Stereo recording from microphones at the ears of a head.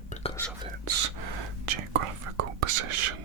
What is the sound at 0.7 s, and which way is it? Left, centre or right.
Whispering, right.